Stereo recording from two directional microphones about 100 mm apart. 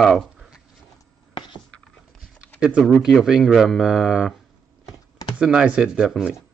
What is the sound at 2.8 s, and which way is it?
Speech, centre (ahead or behind).